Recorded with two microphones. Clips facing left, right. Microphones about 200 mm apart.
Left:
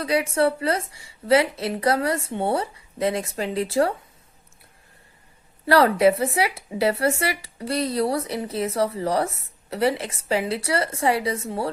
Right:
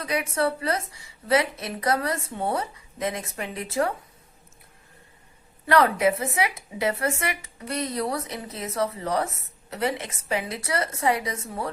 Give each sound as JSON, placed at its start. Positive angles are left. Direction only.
{"t": 0.0, "sound": "a woman's voice", "side_deg": 30}
{"t": 5.6, "sound": "speech", "side_deg": 30}